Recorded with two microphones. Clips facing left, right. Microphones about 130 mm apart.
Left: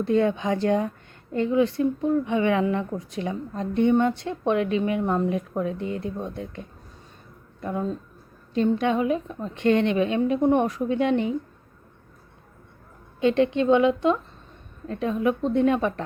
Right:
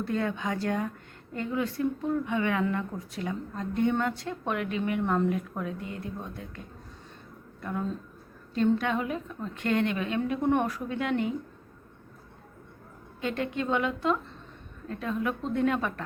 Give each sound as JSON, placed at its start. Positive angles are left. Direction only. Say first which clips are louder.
{"t": 0.0, "sound": "a woman's voice", "louder": "left 8 dB", "side_deg": 25}
{"t": 7.6, "sound": "a woman's voice", "louder": "left 5 dB", "side_deg": 25}
{"t": 13.2, "sound": "a woman's voice", "louder": "left 10 dB", "side_deg": 25}